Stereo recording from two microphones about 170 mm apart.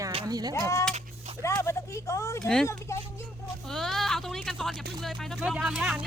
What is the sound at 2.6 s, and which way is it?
Speech, 15° left (ahead or behind).